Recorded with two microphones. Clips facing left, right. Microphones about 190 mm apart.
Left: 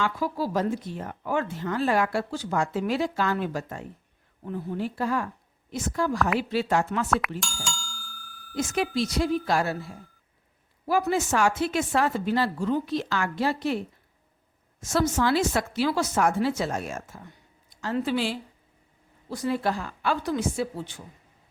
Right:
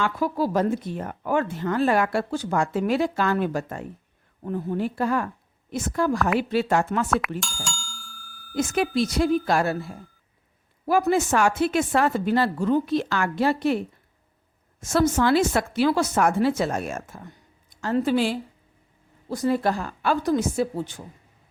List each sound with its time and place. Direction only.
0.0 s a woman's voice: 55° right (ahead or behind)
7.3 s bicycle bell: centre (ahead or behind)
8.5 s a woman's voice: 55° right (ahead or behind)
10.8 s a woman's voice: 55° right (ahead or behind)
14.8 s a woman's voice: 55° right (ahead or behind)